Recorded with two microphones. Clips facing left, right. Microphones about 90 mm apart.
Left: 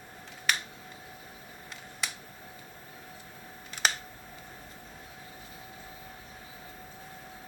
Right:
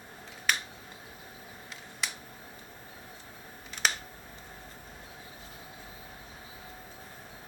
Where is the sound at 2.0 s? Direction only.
Centre (ahead or behind).